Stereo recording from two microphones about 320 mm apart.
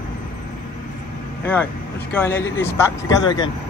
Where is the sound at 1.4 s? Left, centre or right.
Centre.